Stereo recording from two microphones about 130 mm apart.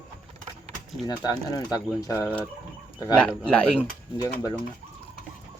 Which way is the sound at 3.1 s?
10° left (ahead or behind).